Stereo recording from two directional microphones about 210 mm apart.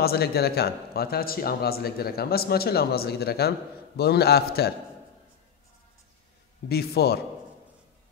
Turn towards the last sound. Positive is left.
turn(degrees=50)  # may be behind; listen again after turning